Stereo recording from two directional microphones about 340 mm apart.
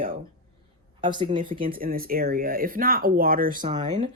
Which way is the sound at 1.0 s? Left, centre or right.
Centre.